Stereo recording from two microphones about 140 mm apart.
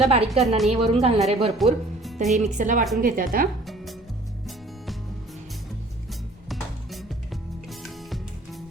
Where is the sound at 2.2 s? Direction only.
Centre (ahead or behind).